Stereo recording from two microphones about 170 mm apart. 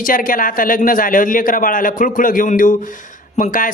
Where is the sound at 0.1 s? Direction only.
55° left (ahead or behind).